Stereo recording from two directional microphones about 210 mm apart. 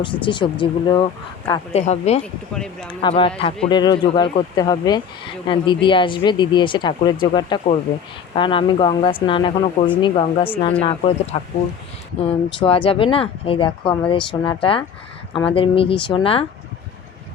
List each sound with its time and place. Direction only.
0.0 s speech: 20° left (ahead or behind)
2.2 s speech: 5° left (ahead or behind)
3.0 s speech: 25° left (ahead or behind)